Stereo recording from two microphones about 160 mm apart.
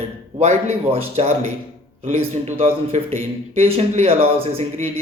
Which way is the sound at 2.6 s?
40° right (ahead or behind).